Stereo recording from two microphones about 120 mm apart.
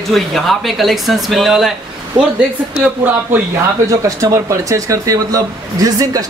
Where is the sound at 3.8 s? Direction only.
30° right (ahead or behind).